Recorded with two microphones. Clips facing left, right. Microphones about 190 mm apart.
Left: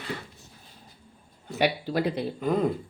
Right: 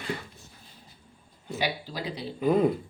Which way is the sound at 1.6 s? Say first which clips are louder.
Left 7 dB; 60° left (ahead or behind).